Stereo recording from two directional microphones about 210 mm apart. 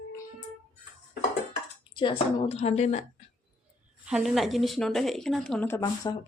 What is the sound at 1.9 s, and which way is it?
A woman's voice, 20° left (ahead or behind).